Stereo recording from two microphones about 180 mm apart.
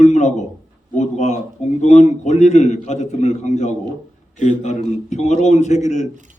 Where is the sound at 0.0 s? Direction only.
40° left (ahead or behind).